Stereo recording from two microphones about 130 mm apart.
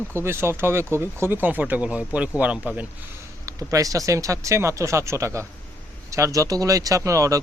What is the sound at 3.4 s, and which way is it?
Speech, 25° right (ahead or behind).